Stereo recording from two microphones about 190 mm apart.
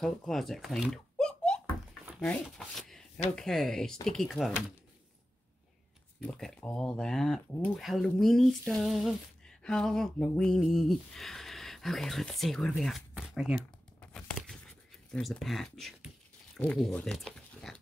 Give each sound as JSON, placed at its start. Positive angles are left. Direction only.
{"t": 0.0, "sound": "speech", "side_deg": 0}
{"t": 6.2, "sound": "speech", "side_deg": 5}
{"t": 14.0, "sound": "crumpling", "side_deg": 5}
{"t": 15.0, "sound": "speech", "side_deg": 5}